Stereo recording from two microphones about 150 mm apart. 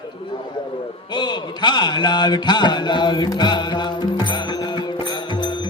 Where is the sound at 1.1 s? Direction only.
30° left (ahead or behind).